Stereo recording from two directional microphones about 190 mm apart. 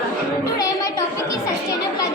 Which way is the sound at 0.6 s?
20° left (ahead or behind).